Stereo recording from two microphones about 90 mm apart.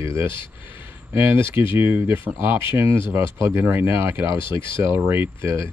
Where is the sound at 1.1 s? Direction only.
25° right (ahead or behind).